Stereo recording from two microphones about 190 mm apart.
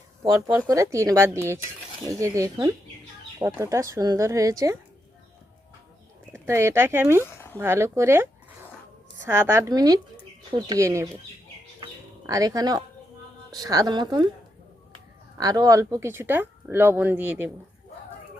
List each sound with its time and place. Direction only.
0.2 s speech: 20° right (ahead or behind)
6.3 s speech: 15° right (ahead or behind)
7.3 s a sound: 10° left (ahead or behind)
7.6 s speech: 15° right (ahead or behind)
11.8 s chicken: 20° right (ahead or behind)
13.5 s a woman's voice: 20° right (ahead or behind)
15.4 s speech: 20° right (ahead or behind)